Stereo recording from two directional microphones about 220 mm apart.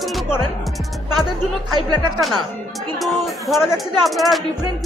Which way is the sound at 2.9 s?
Centre (ahead or behind).